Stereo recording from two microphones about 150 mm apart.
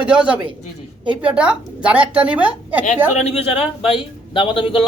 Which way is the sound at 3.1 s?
40° left (ahead or behind).